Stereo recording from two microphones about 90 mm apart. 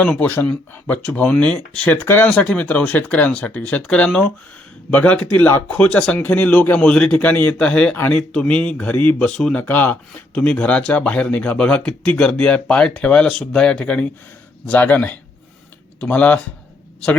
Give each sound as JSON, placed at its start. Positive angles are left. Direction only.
{"t": 0.2, "sound": "speech", "side_deg": 20}